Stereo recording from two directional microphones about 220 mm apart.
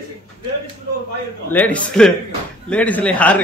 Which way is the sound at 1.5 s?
5° left (ahead or behind).